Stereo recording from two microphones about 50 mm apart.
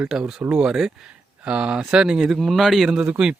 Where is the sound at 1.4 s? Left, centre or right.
Right.